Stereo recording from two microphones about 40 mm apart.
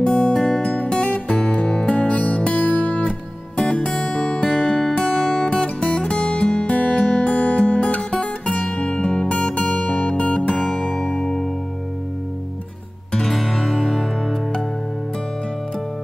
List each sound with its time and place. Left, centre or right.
0.0 s music: centre
0.6 s music: left
3.5 s music: left
8.8 s music: left
9.3 s music: left; by 11.1 s centre
13.2 s music: centre